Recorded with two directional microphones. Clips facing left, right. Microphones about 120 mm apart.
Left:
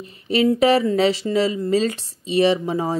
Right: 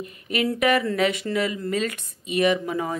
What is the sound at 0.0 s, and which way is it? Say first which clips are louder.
Speech: left 7 dB; 30° left (ahead or behind).